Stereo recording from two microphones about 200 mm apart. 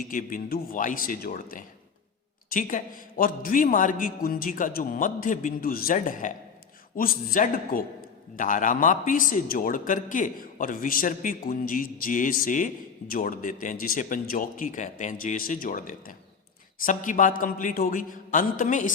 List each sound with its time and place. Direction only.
0.1 s a man's voice: 45° left (ahead or behind)